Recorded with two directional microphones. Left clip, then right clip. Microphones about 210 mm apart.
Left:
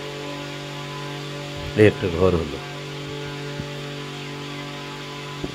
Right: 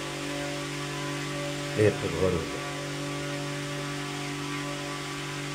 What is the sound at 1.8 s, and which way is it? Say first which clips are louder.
Speech: left 8 dB; 45° left (ahead or behind).